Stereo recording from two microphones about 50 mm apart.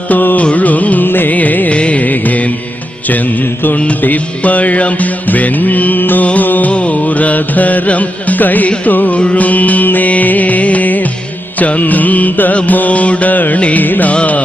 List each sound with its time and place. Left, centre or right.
0.1 s mantra: left
0.4 s music: left
3.8 s mantra: left
6.2 s music: left
11.6 s mantra: left
14.1 s music: left